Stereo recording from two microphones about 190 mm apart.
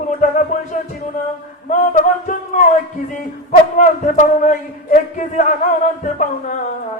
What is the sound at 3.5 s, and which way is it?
Music, 40° left (ahead or behind).